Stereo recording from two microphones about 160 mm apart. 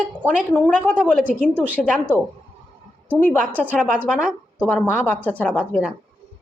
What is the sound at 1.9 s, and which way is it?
Speech, 10° right (ahead or behind).